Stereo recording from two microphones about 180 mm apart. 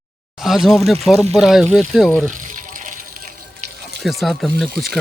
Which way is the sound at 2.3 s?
45° right (ahead or behind).